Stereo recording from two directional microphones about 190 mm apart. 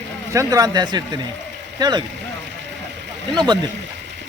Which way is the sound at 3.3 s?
25° right (ahead or behind).